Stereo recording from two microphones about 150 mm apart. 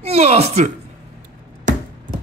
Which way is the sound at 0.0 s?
45° right (ahead or behind).